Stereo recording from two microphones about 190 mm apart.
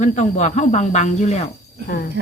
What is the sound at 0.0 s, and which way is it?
Speech, 40° left (ahead or behind).